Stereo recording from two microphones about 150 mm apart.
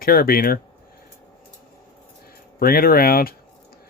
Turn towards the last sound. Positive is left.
turn(degrees=80)